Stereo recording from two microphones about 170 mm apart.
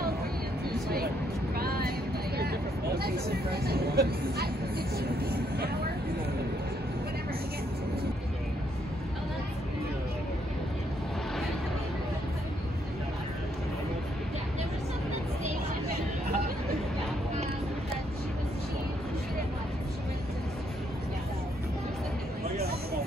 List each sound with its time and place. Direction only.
1.5 s vehicle: 60° right (ahead or behind)
2.3 s a sound: 65° right (ahead or behind)
4.9 s vehicle: 65° right (ahead or behind)